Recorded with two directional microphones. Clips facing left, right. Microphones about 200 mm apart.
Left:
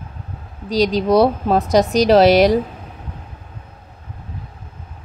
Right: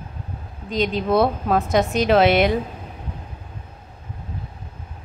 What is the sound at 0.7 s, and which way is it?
A woman's voice, 35° left (ahead or behind).